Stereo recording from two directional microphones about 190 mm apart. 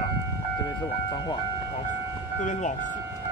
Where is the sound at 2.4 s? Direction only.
40° left (ahead or behind).